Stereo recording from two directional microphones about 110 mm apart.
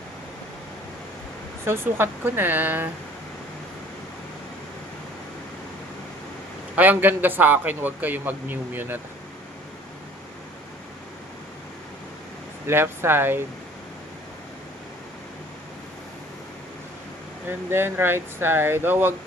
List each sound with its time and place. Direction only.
1.6 s speech: 20° right (ahead or behind)
6.7 s a man's voice: 15° right (ahead or behind)
12.6 s speech: 20° right (ahead or behind)
17.7 s speech: 20° right (ahead or behind)